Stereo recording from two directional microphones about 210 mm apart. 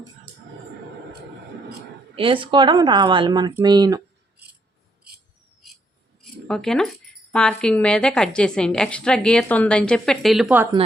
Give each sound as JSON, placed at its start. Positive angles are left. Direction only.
{"t": 2.1, "sound": "a woman's voice", "side_deg": -25}
{"t": 3.5, "sound": "a sound", "side_deg": -20}
{"t": 6.5, "sound": "a woman's voice", "side_deg": 5}